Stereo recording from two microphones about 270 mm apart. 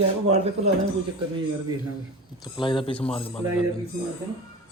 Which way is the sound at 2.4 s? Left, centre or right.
Centre.